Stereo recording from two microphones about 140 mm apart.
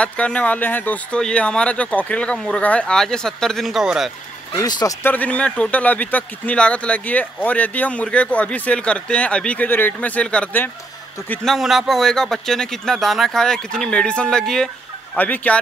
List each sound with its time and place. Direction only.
0.0 s speech: 10° left (ahead or behind)
4.6 s speech: 25° left (ahead or behind)
5.0 s speech: 10° left (ahead or behind)
11.4 s a man's voice: centre (ahead or behind)